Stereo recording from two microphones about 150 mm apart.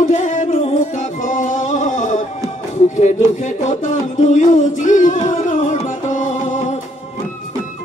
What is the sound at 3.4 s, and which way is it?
Music, 55° left (ahead or behind).